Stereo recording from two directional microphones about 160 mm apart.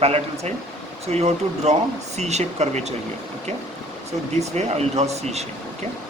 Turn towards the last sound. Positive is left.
turn(degrees=-45)  # may be behind; listen again after turning